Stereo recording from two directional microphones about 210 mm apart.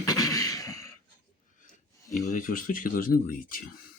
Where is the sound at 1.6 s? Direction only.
40° left (ahead or behind).